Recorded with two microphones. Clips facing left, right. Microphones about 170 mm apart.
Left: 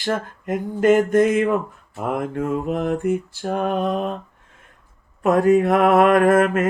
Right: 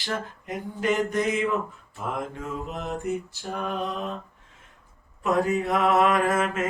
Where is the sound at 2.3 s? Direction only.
55° left (ahead or behind).